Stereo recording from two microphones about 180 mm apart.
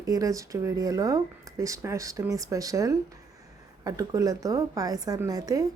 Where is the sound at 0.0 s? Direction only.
20° right (ahead or behind).